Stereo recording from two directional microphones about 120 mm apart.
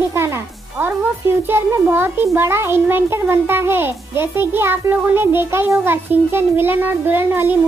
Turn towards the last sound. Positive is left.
turn(degrees=-15)  # may be behind; listen again after turning